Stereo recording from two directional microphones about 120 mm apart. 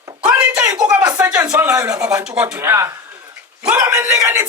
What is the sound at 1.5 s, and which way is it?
Speech, 20° right (ahead or behind).